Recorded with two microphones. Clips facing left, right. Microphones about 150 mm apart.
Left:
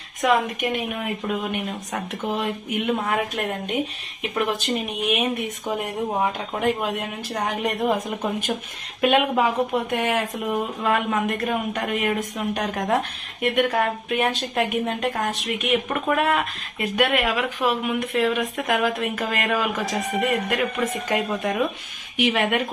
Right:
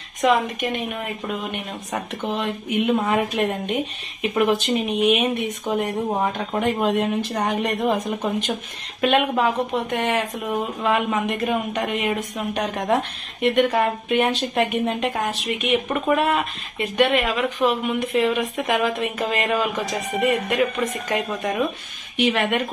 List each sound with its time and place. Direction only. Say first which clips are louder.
0.2 s speech: right 1 dB; 5° left (ahead or behind)
2.2 s speech: even; centre (ahead or behind)
6.5 s speech: right 3 dB; centre (ahead or behind)